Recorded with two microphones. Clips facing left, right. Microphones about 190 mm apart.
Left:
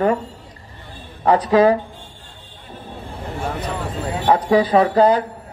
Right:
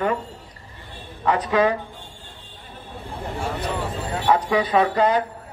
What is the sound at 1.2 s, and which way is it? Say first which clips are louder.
Speech: left 6 dB; 35° left (ahead or behind).